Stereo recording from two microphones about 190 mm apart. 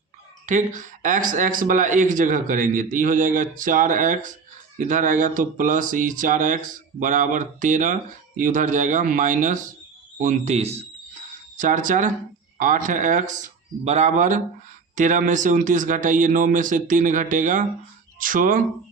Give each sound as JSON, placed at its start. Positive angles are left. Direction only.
{"t": 0.4, "sound": "speech", "side_deg": -40}
{"t": 10.2, "sound": "a sound", "side_deg": -40}
{"t": 12.5, "sound": "speech", "side_deg": -45}